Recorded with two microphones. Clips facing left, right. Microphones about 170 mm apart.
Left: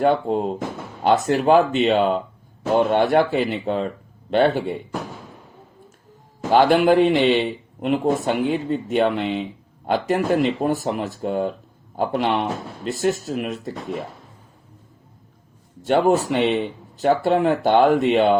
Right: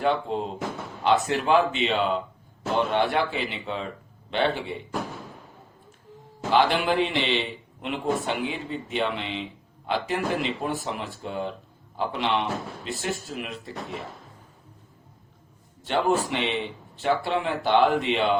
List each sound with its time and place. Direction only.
0.0 s a man's voice: 45° left (ahead or behind)
6.5 s a man's voice: 45° left (ahead or behind)
15.8 s a man's voice: 45° left (ahead or behind)